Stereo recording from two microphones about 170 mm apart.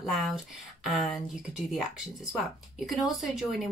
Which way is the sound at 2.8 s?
Centre (ahead or behind).